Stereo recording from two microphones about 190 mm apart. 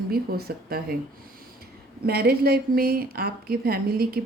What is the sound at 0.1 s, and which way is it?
Speech, 55° right (ahead or behind).